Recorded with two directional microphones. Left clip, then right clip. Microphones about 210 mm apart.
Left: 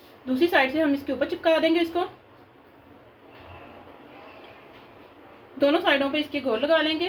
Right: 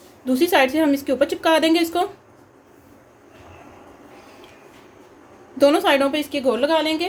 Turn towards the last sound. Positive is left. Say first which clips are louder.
# right 4 dB
turn(degrees=-60)  # may be behind; listen again after turning